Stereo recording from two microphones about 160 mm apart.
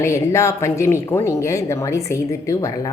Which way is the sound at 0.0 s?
15° left (ahead or behind).